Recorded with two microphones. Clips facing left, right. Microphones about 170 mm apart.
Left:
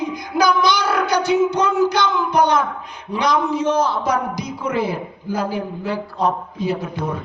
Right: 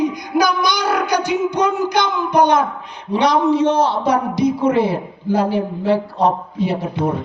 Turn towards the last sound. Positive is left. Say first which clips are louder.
# right 3 dB
turn(degrees=-30)  # may be behind; listen again after turning